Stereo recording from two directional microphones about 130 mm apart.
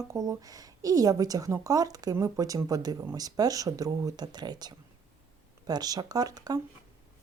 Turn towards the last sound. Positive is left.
turn(degrees=-30)  # may be behind; listen again after turning